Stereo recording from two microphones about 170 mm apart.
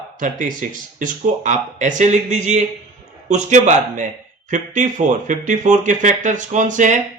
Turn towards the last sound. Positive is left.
turn(degrees=-45)  # may be behind; listen again after turning